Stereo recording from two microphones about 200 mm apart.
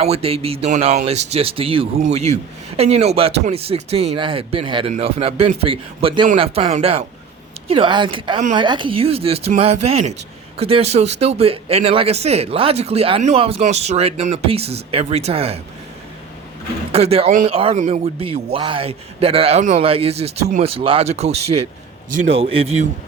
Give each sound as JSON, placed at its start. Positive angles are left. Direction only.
{"t": 0.0, "sound": "speech", "side_deg": -30}
{"t": 16.9, "sound": "speech", "side_deg": -30}